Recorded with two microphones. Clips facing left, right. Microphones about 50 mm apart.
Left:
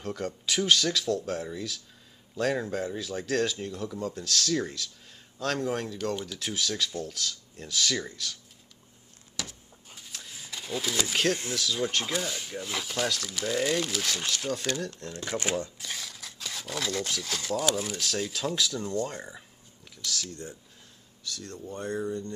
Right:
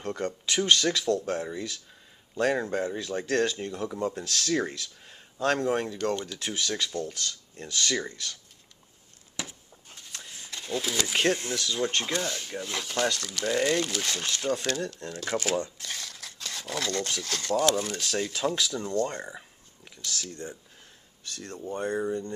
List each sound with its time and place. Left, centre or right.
0.0 s speech: centre
5.9 s speech: centre
9.4 s a sound: right
9.8 s a sound: centre
11.3 s speech: centre
21.2 s speech: right